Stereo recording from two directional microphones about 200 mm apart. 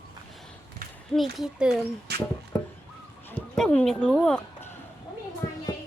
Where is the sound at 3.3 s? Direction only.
5° left (ahead or behind).